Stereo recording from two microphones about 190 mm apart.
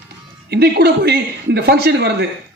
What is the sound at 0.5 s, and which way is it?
A man's voice, 60° right (ahead or behind).